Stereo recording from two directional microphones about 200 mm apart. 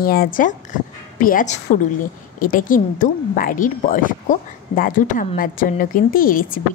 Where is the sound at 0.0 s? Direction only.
45° left (ahead or behind).